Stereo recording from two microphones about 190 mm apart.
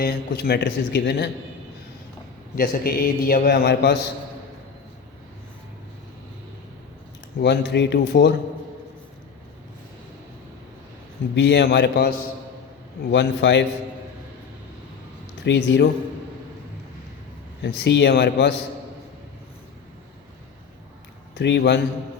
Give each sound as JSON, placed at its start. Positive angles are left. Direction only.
{"t": 0.0, "sound": "speech", "side_deg": 55}
{"t": 2.6, "sound": "a man's voice", "side_deg": 50}
{"t": 7.3, "sound": "speech", "side_deg": 60}
{"t": 11.3, "sound": "speech", "side_deg": 65}
{"t": 13.1, "sound": "a man's voice", "side_deg": 70}
{"t": 15.4, "sound": "a man's voice", "side_deg": 70}
{"t": 17.6, "sound": "speech", "side_deg": 65}
{"t": 21.3, "sound": "speech", "side_deg": 65}